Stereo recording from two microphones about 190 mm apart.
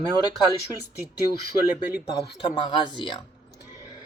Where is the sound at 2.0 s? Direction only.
25° left (ahead or behind).